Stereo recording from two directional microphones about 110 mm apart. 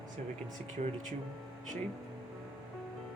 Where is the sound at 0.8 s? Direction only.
90° right.